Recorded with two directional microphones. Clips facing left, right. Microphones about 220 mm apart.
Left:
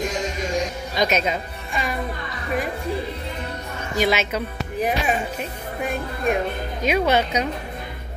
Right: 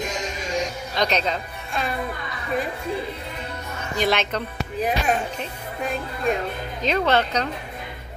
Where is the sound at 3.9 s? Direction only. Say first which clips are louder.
Left 1 dB; 5° left (ahead or behind).